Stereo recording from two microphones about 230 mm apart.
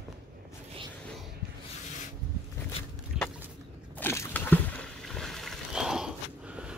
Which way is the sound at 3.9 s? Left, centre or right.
Centre.